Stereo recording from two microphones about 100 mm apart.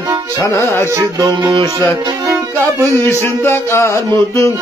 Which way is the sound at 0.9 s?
30° right (ahead or behind).